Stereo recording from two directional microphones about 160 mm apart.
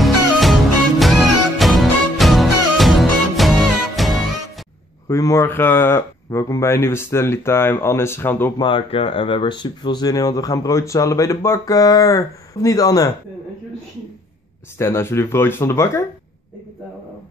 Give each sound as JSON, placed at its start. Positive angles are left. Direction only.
{"t": 0.0, "sound": "music", "side_deg": 0}
{"t": 5.0, "sound": "speech", "side_deg": 20}
{"t": 8.5, "sound": "speech", "side_deg": 30}
{"t": 14.8, "sound": "speech", "side_deg": 15}